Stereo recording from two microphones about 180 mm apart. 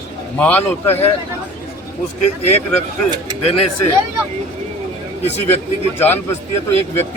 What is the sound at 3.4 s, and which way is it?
Speech, 35° left (ahead or behind).